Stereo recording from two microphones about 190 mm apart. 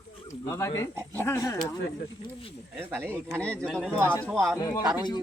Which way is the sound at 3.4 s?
5° left (ahead or behind).